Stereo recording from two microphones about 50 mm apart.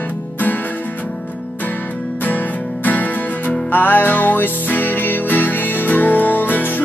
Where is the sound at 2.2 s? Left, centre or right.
Left.